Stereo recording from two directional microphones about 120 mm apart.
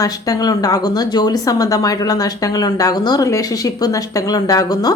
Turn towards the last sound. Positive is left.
turn(degrees=35)  # may be behind; listen again after turning